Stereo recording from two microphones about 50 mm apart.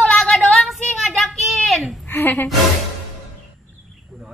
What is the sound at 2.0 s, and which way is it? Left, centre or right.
Music, left.